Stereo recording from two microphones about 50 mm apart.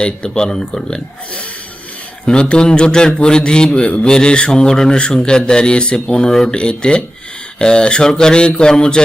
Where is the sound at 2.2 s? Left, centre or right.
Centre.